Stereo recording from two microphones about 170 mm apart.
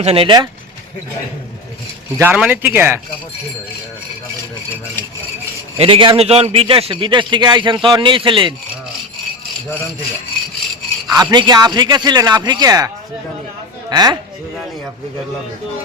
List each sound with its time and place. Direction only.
0.0 s speech: 35° right (ahead or behind)
2.1 s speech: 10° right (ahead or behind)
5.7 s a man's voice: 35° right (ahead or behind)
11.1 s a man's voice: 20° right (ahead or behind)
13.9 s a man's voice: 25° right (ahead or behind)